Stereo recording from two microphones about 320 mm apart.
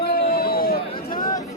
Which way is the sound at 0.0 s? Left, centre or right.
Left.